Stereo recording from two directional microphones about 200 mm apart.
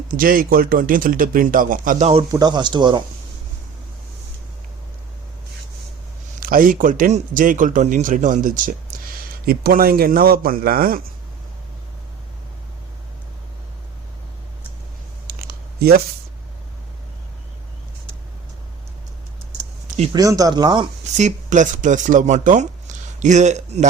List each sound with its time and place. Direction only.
0.1 s speech: 45° right (ahead or behind)
2.3 s speech: 20° right (ahead or behind)
6.4 s a man's voice: 45° right (ahead or behind)
15.3 s a sound: 50° right (ahead or behind)
20.1 s speech: 15° right (ahead or behind)
21.2 s speech: 35° right (ahead or behind)